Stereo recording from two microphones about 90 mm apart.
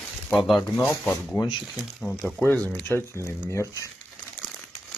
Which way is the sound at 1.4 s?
45° left (ahead or behind).